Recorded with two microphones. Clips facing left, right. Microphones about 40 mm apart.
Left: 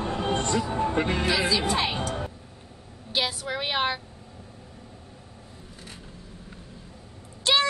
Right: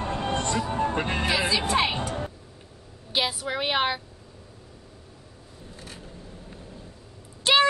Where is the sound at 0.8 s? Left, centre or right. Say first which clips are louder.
Left 1 dB; right.